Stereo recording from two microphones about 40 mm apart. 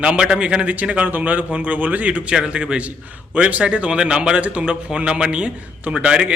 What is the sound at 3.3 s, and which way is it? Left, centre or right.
A man's voice, right.